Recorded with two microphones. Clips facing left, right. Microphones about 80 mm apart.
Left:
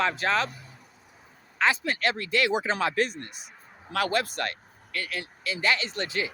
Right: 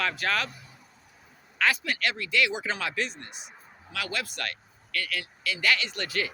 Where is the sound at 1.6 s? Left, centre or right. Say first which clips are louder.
Left 2 dB; left.